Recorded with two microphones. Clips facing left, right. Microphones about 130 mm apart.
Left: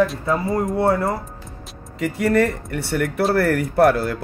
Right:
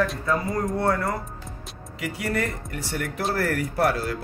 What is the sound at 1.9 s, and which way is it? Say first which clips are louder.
Speech: left 9 dB; 50° left (ahead or behind).